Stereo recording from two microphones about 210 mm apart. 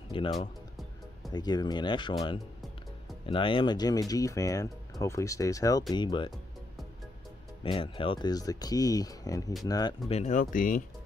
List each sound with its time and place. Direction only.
0.1 s speech: 25° left (ahead or behind)
7.6 s speech: 25° left (ahead or behind); by 10.8 s 40° left (ahead or behind)